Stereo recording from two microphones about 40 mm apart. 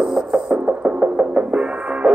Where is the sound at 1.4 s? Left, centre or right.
Right.